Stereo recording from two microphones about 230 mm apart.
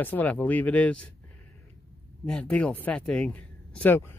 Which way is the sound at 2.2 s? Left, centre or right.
Centre.